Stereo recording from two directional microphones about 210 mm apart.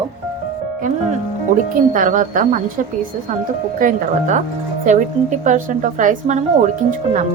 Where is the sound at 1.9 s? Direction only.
40° right (ahead or behind).